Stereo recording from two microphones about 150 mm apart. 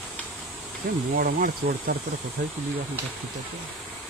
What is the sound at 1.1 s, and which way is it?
Speech, 75° right (ahead or behind).